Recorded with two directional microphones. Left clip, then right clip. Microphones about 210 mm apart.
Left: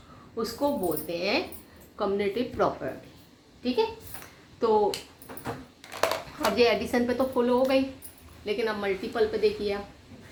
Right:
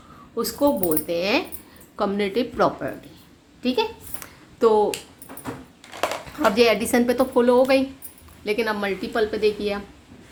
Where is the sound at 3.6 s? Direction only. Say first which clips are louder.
Right 4 dB; 50° right (ahead or behind).